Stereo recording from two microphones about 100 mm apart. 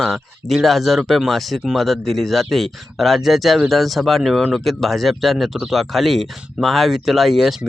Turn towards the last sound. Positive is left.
turn(degrees=0)  # may be behind; listen again after turning